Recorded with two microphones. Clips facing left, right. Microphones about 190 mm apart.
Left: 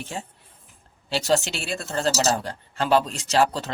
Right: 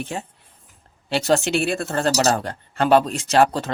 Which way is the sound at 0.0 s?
60° right (ahead or behind).